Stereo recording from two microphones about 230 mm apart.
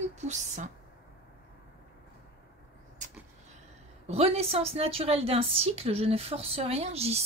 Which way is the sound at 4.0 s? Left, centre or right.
Right.